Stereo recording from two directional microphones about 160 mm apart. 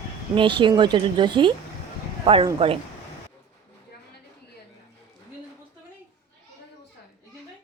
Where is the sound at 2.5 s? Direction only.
35° right (ahead or behind).